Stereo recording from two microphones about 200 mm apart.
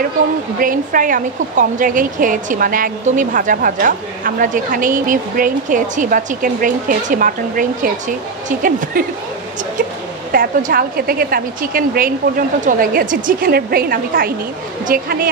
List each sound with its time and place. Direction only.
0.6 s speech: 45° right (ahead or behind)
10.3 s speech: 45° right (ahead or behind)